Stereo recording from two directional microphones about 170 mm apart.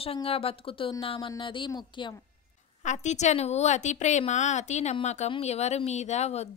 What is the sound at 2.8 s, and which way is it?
A woman's voice, 45° left (ahead or behind).